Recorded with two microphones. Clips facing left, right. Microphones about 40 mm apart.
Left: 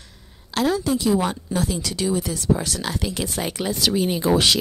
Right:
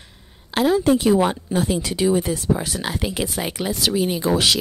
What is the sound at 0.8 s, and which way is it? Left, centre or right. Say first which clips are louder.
Speech: right 4 dB; right.